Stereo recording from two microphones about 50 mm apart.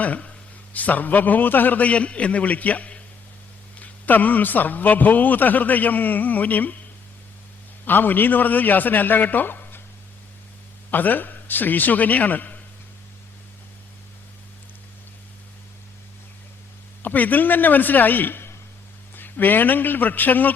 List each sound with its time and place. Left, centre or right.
0.0 s a man's voice: left
7.9 s a man's voice: left
10.9 s a man's voice: left
17.0 s a man's voice: left